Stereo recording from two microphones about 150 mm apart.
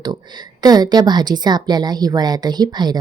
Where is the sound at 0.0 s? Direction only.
30° right (ahead or behind).